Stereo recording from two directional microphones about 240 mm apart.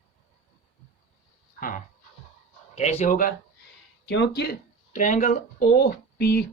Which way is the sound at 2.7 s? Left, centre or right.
Left.